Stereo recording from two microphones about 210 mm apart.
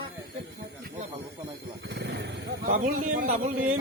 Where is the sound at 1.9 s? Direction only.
55° right (ahead or behind).